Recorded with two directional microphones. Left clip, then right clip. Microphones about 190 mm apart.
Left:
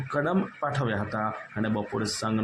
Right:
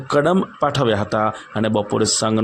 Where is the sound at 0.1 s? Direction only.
45° right (ahead or behind).